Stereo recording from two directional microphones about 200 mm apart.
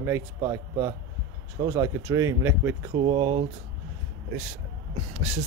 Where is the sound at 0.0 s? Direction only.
15° right (ahead or behind).